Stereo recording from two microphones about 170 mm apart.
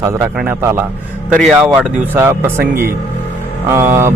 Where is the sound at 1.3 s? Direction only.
Centre (ahead or behind).